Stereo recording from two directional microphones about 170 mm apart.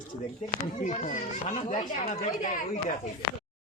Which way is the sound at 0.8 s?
50° left (ahead or behind).